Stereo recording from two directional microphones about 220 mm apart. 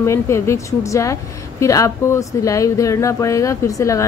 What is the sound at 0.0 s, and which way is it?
Speech, 10° left (ahead or behind).